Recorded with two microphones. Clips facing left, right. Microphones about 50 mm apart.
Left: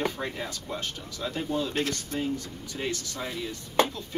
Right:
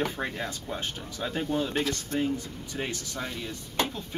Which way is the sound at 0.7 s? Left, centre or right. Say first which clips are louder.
Right 1 dB; right.